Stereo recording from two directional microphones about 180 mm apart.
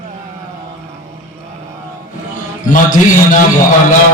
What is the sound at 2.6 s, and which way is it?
Speech, 45° left (ahead or behind).